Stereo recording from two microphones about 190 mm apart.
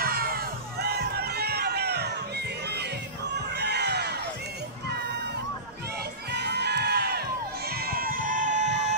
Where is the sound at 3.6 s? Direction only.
60° right (ahead or behind).